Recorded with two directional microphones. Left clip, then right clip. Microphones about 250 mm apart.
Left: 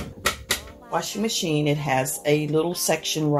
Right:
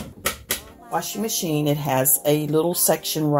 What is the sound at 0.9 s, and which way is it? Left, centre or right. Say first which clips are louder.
Speech: even; right.